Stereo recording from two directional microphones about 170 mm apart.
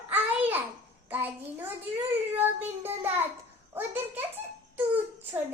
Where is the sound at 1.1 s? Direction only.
10° right (ahead or behind).